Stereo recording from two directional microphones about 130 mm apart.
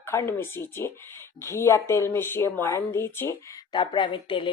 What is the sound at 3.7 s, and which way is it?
Speech, 35° left (ahead or behind).